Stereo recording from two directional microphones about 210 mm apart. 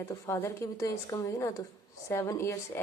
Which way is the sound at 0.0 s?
15° left (ahead or behind).